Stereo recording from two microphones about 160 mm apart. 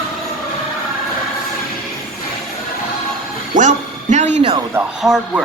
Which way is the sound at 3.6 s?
45° right (ahead or behind).